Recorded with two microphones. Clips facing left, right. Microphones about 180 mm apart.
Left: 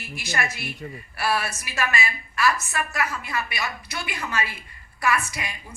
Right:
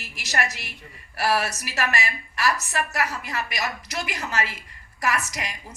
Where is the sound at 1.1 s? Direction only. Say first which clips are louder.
Right 2 dB; 40° right (ahead or behind).